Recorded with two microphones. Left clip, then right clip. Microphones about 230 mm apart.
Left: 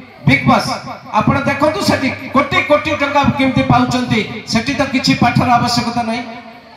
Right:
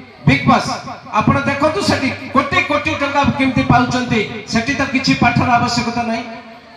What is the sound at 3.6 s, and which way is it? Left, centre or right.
Speech, left.